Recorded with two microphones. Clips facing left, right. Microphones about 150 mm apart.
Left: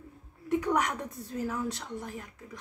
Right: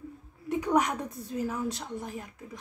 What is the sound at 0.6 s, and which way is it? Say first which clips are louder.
A woman's voice: right 3 dB; 15° right (ahead or behind).